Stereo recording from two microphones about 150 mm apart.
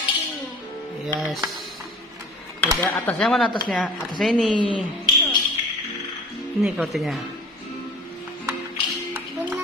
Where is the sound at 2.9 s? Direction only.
10° left (ahead or behind).